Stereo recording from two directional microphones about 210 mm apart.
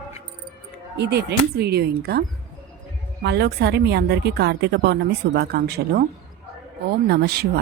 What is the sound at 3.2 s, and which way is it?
Speech, 50° right (ahead or behind).